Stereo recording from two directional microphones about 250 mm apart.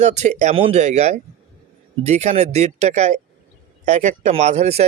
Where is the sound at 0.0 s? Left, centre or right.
Right.